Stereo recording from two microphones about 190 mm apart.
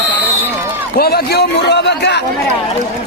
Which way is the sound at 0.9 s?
55° left (ahead or behind).